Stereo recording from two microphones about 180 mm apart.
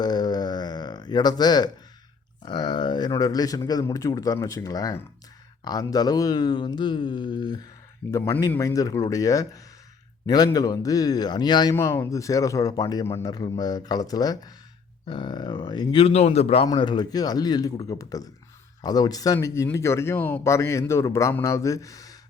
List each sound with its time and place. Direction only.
0.0 s a sound: 25° left (ahead or behind)
2.4 s speech: 25° left (ahead or behind)
16.6 s a man's voice: 25° left (ahead or behind)